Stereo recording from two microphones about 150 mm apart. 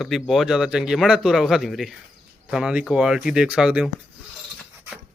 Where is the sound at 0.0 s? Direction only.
Centre (ahead or behind).